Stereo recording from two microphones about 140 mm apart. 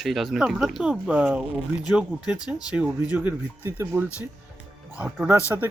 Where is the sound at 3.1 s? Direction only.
15° right (ahead or behind).